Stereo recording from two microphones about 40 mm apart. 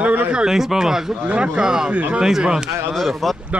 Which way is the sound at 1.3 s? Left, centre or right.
Right.